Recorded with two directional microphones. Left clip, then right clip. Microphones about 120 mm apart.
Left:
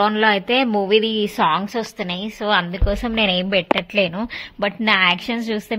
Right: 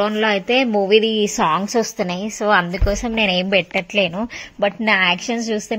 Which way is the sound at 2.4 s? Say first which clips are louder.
Right 3 dB; 40° right (ahead or behind).